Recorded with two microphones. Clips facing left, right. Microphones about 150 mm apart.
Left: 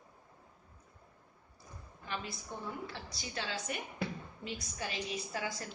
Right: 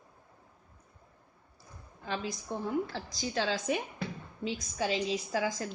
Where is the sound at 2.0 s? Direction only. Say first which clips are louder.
Right 6 dB; 90° right.